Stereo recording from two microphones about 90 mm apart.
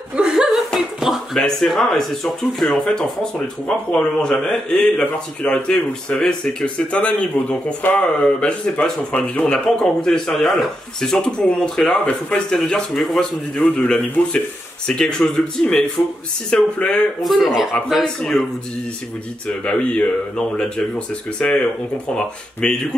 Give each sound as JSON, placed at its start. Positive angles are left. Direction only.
{"t": 0.1, "sound": "a sound", "side_deg": -5}
{"t": 1.4, "sound": "speech", "side_deg": 5}
{"t": 17.2, "sound": "speech", "side_deg": 0}
{"t": 19.4, "sound": "speech", "side_deg": 15}